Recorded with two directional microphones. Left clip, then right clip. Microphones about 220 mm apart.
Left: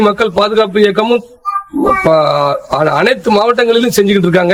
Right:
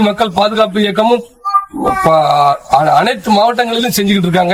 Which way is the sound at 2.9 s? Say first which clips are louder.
Even; 25° left (ahead or behind).